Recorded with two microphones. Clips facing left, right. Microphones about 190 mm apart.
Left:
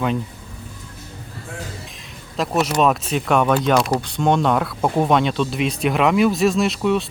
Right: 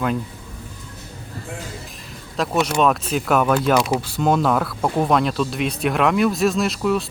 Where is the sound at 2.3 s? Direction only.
Centre (ahead or behind).